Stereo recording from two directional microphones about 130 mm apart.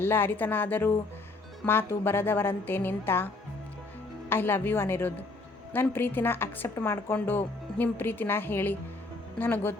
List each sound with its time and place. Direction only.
0.0 s a woman's voice: 15° left (ahead or behind)
4.3 s a woman's voice: 15° left (ahead or behind)